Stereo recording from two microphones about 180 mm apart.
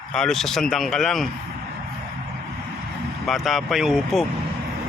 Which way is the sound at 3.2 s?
Centre (ahead or behind).